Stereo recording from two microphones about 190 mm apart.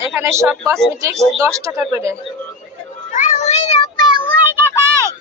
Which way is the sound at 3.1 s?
40° left (ahead or behind).